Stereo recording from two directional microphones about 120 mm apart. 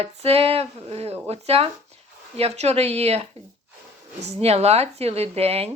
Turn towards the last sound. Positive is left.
turn(degrees=-60)  # may be behind; listen again after turning